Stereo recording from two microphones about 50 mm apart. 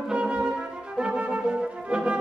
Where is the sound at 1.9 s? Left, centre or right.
Centre.